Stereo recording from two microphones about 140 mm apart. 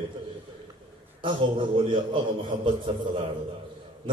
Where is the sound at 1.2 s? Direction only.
35° right (ahead or behind).